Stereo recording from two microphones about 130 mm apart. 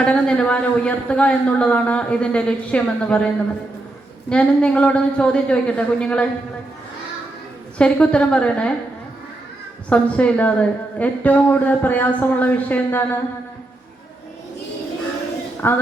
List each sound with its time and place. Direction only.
0.0 s a man's voice: 5° left (ahead or behind)
4.3 s a man's voice: 10° left (ahead or behind)
7.8 s a man's voice: 10° left (ahead or behind)
9.9 s a man's voice: 10° left (ahead or behind)
15.6 s a man's voice: 15° left (ahead or behind)